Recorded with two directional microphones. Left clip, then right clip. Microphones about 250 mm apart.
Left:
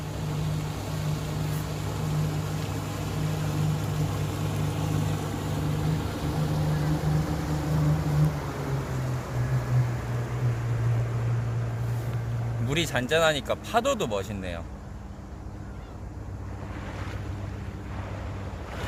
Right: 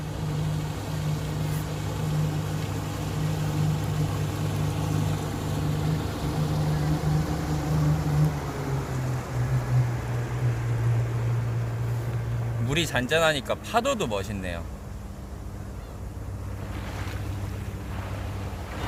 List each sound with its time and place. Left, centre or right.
0.1 s vehicle: centre; by 7.9 s right
9.9 s vehicle: right
12.6 s speech: centre